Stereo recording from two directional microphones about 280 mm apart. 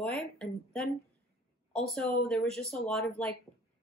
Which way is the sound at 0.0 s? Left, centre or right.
Centre.